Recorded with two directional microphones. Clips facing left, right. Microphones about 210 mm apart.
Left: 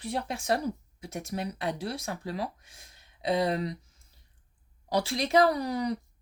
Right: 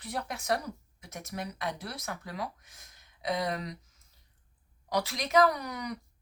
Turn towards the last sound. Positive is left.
turn(degrees=30)  # may be behind; listen again after turning